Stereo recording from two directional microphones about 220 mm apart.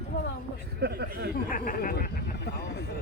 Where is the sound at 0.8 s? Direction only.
45° right (ahead or behind).